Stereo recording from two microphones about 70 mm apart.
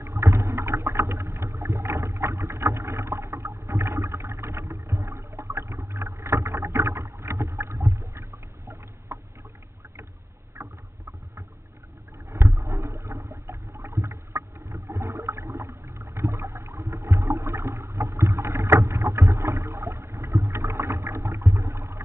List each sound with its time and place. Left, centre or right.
0.2 s rowboat: right
12.3 s rowboat: right
12.6 s water: right
14.0 s rowboat: right
15.0 s a sound: right
16.9 s boat: right
17.4 s rowboat: right
19.2 s boat: right
20.2 s boat: right
20.5 s vehicle: right